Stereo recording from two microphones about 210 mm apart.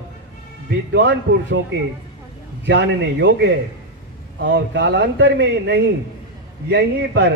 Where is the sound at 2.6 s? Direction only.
55° right (ahead or behind).